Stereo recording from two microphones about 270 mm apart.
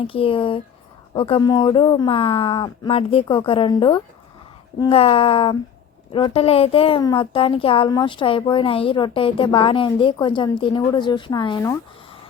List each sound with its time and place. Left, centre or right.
0.0 s a woman's voice: centre